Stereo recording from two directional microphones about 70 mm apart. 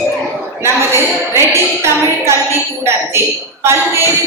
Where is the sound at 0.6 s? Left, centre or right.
Right.